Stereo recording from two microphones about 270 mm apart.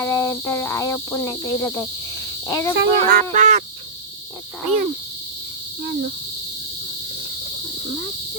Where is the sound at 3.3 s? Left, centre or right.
Right.